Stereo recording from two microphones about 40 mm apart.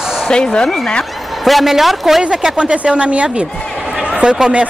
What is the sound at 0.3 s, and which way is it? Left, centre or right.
Speech, left.